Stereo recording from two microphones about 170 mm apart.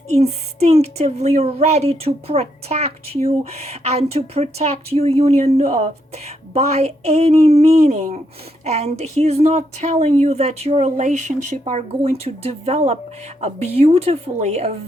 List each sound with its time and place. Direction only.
0.1 s speech: 40° right (ahead or behind)